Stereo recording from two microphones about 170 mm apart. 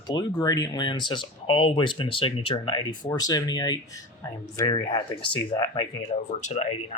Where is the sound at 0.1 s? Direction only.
25° left (ahead or behind).